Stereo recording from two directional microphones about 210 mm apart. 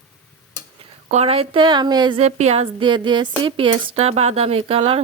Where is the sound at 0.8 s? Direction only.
30° right (ahead or behind).